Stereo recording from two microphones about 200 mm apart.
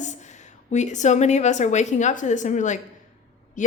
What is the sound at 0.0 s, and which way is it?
A woman's voice, 35° left (ahead or behind).